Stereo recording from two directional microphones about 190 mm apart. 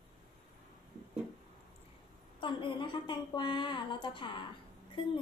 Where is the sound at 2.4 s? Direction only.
25° left (ahead or behind).